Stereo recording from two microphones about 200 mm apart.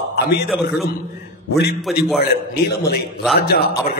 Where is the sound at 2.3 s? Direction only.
50° left (ahead or behind).